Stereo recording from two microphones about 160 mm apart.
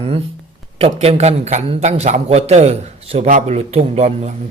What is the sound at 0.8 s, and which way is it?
A man's voice, 40° right (ahead or behind).